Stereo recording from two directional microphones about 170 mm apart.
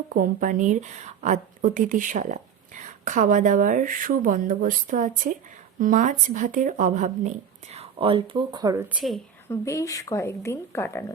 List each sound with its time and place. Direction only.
0.1 s speech: 50° right (ahead or behind); by 8.9 s 20° right (ahead or behind)
9.5 s speech: 20° left (ahead or behind)